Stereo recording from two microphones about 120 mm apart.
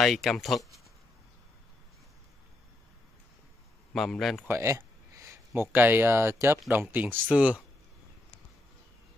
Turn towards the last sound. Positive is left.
turn(degrees=-10)  # may be behind; listen again after turning